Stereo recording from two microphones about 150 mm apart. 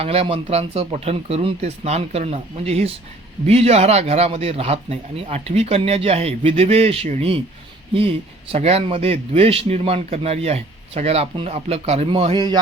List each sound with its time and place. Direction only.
0.0 s a man's voice: 40° right (ahead or behind)